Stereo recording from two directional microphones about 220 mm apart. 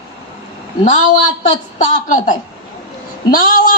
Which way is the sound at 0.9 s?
35° left (ahead or behind).